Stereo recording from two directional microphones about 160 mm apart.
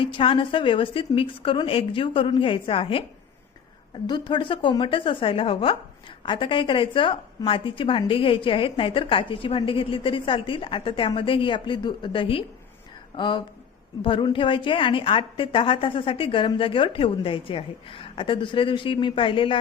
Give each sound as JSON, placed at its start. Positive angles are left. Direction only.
{"t": 0.0, "sound": "a woman's voice", "side_deg": 35}
{"t": 4.0, "sound": "a woman's voice", "side_deg": 30}